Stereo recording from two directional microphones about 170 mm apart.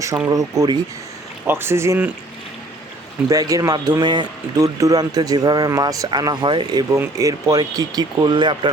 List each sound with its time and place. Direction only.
0.3 s speech: 20° right (ahead or behind)
3.2 s speech: 20° right (ahead or behind)